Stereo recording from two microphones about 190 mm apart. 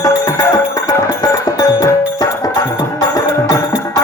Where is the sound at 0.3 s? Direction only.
20° left (ahead or behind).